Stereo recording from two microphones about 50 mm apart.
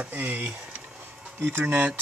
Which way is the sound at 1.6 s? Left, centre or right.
Right.